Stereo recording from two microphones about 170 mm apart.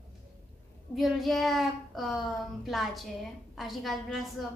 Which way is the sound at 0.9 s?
Centre (ahead or behind).